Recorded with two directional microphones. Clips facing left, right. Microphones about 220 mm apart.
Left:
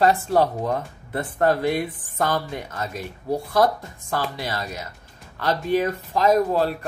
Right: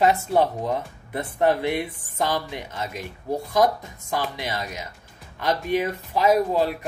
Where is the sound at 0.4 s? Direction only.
20° right (ahead or behind).